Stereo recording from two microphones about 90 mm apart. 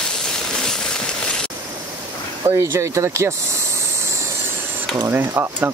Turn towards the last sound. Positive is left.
turn(degrees=-25)  # may be behind; listen again after turning